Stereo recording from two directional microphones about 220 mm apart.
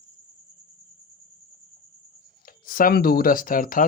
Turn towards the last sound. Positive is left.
turn(degrees=40)  # may be behind; listen again after turning